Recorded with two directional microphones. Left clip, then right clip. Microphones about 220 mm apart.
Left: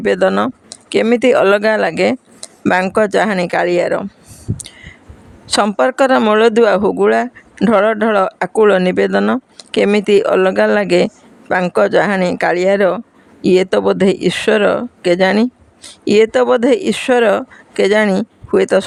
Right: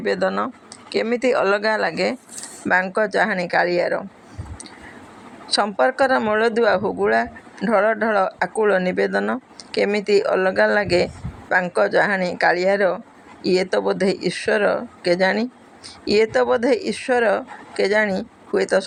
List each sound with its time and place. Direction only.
0.0 s speech: 45° left (ahead or behind)
5.5 s speech: 45° left (ahead or behind)